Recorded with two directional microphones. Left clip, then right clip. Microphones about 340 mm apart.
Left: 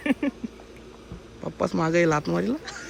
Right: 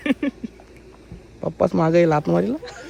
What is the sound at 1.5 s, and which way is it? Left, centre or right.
A man's voice, centre.